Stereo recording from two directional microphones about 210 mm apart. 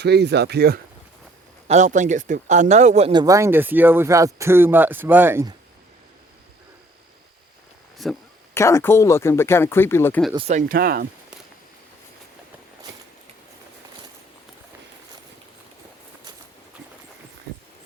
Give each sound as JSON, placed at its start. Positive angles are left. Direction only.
{"t": 0.0, "sound": "speech", "side_deg": -55}
{"t": 1.6, "sound": "speech", "side_deg": -35}
{"t": 3.1, "sound": "speech", "side_deg": -20}
{"t": 8.0, "sound": "speech", "side_deg": 0}
{"t": 8.5, "sound": "speech", "side_deg": 15}
{"t": 10.3, "sound": "speech", "side_deg": -30}
{"t": 10.7, "sound": "speech", "side_deg": -45}